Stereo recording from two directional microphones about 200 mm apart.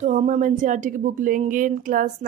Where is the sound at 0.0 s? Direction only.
35° right (ahead or behind).